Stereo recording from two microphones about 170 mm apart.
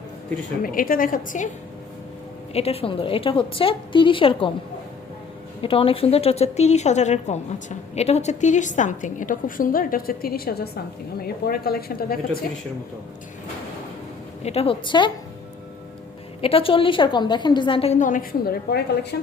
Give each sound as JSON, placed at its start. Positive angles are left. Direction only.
{"t": 0.6, "sound": "a woman's voice", "side_deg": 55}
{"t": 2.5, "sound": "a woman's voice", "side_deg": 35}
{"t": 5.6, "sound": "a woman's voice", "side_deg": 35}
{"t": 14.4, "sound": "a woman's voice", "side_deg": 35}
{"t": 16.4, "sound": "a woman's voice", "side_deg": 35}